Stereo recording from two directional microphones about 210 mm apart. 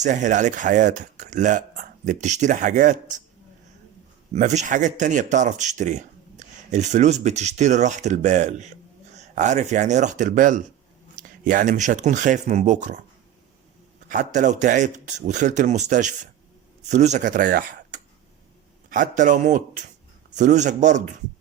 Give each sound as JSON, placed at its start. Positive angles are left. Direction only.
{"t": 0.0, "sound": "speech", "side_deg": -35}
{"t": 4.3, "sound": "speech", "side_deg": -35}
{"t": 14.1, "sound": "speech", "side_deg": -35}